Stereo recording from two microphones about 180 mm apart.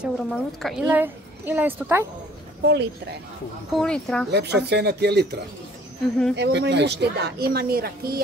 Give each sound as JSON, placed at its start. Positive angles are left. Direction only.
{"t": 0.0, "sound": "speech", "side_deg": 0}
{"t": 0.8, "sound": "a woman's voice", "side_deg": -10}
{"t": 2.6, "sound": "speech", "side_deg": -70}
{"t": 3.7, "sound": "speech", "side_deg": 5}
{"t": 4.3, "sound": "speech", "side_deg": -70}